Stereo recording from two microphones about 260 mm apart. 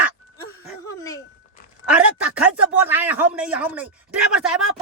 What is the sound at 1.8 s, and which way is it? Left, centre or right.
A man's voice, centre.